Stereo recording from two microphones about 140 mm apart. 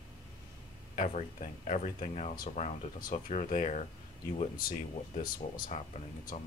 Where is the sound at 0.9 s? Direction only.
65° left (ahead or behind).